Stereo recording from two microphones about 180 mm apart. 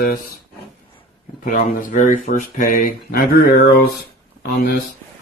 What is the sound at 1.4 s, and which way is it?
Speech, 50° left (ahead or behind).